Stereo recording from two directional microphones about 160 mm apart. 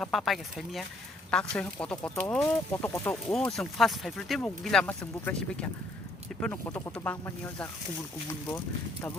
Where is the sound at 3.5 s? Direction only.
Centre (ahead or behind); by 9.1 s 15° left (ahead or behind).